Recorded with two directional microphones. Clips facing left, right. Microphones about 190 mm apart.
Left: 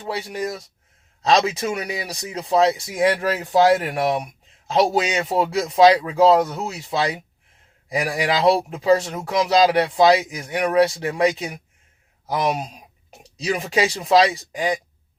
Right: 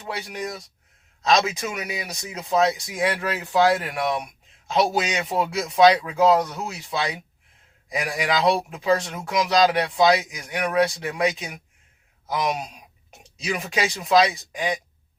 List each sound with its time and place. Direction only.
0.0 s speech: 30° left (ahead or behind)